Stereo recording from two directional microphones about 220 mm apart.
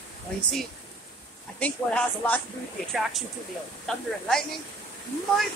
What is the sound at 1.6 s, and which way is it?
Speech, 5° left (ahead or behind).